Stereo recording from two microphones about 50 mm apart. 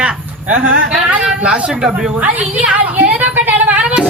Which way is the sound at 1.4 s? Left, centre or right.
Right.